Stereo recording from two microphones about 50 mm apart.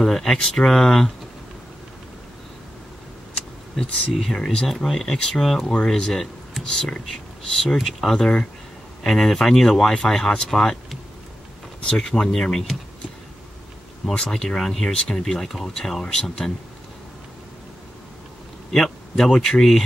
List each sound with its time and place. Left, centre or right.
0.0 s speech: centre
3.3 s a sound: centre
4.4 s speech: centre
8.2 s speech: centre
9.0 s speech: centre
12.0 s speech: centre
14.6 s speech: centre
18.7 s speech: centre